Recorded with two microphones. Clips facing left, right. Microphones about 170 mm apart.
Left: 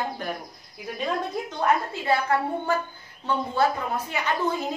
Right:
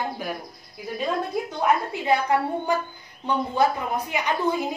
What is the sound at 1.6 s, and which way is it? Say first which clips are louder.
A woman's voice: even; 15° right (ahead or behind).